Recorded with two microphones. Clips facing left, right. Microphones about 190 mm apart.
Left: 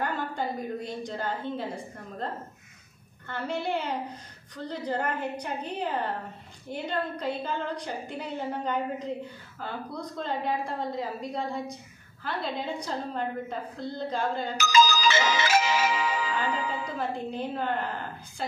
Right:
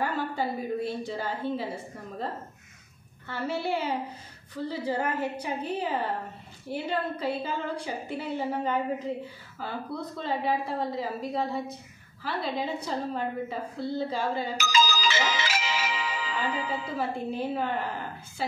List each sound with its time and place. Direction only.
0.0 s a woman's voice: 5° right (ahead or behind)
3.3 s a woman's voice: 5° right (ahead or behind)
15.0 s music: 50° left (ahead or behind)
16.9 s a woman's voice: 5° right (ahead or behind)